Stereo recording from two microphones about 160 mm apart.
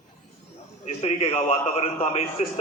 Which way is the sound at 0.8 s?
40° left (ahead or behind).